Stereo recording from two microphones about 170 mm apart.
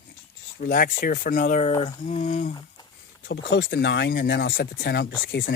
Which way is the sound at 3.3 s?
90° left.